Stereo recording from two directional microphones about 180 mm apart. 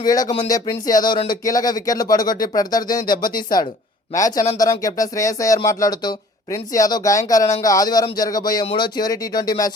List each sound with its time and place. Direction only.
0.0 s speech: 20° left (ahead or behind)